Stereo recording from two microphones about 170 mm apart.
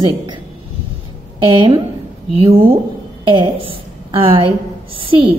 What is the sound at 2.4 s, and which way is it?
A woman's voice, 35° right (ahead or behind).